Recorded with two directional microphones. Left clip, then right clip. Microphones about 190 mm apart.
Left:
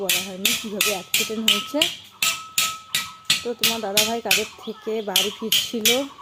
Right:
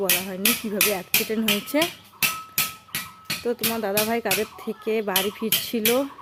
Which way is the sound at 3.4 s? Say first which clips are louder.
Left 2 dB; 20° right (ahead or behind).